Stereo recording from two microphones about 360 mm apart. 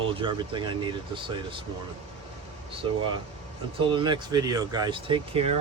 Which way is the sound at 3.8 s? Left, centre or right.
Centre.